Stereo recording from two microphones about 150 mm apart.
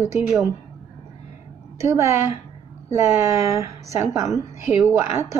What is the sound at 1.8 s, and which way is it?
A woman's voice, 20° right (ahead or behind).